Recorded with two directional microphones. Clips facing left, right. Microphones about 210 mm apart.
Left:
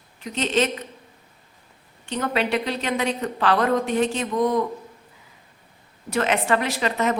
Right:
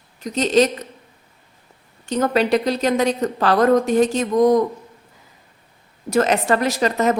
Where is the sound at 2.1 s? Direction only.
40° right (ahead or behind).